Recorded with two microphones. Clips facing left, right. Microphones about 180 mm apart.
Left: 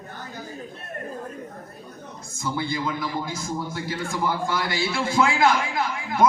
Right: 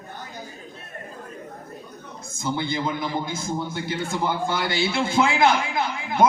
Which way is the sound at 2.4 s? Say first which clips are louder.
Right 1 dB; 25° right (ahead or behind).